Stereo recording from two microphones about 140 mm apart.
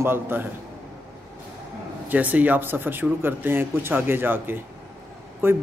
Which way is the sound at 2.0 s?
10° right (ahead or behind).